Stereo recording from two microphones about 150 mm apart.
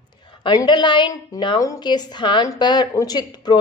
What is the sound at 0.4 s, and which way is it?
A woman's voice, 30° left (ahead or behind).